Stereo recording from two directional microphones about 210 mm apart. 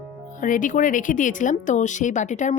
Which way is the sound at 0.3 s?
40° left (ahead or behind).